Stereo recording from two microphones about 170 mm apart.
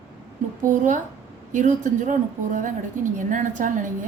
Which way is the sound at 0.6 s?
50° right (ahead or behind).